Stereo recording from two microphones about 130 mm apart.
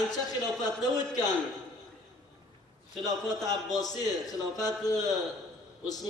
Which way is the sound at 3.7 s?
30° left (ahead or behind).